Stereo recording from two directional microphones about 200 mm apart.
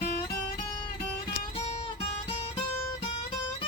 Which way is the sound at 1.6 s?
30° left (ahead or behind).